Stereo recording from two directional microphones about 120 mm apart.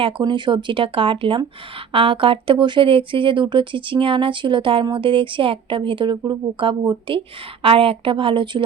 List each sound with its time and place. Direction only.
0.0 s speech: 40° right (ahead or behind)